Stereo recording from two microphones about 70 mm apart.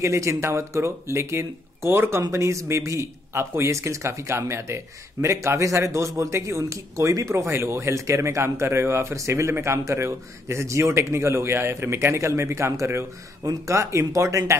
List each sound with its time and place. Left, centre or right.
0.0 s a man's voice: right
7.3 s speech: right
13.4 s a man's voice: right